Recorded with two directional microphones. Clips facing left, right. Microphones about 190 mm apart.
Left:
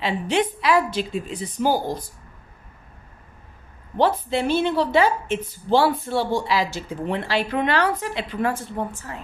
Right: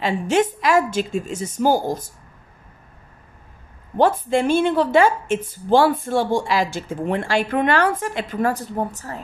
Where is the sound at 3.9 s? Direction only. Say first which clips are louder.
Right 3 dB; 50° right (ahead or behind).